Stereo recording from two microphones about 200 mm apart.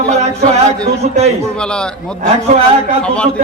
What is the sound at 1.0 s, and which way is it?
Speech, 40° right (ahead or behind).